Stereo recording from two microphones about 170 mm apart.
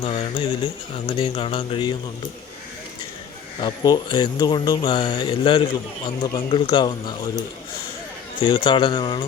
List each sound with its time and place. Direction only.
0.0 s speech: 35° left (ahead or behind)
3.6 s speech: 25° left (ahead or behind)
8.4 s speech: 30° left (ahead or behind)